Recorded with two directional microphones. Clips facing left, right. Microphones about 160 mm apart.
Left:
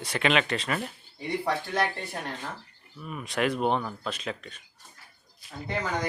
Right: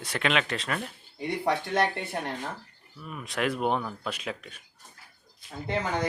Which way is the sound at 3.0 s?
Centre (ahead or behind).